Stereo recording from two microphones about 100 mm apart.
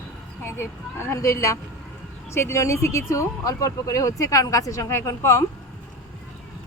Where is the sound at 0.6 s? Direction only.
25° left (ahead or behind).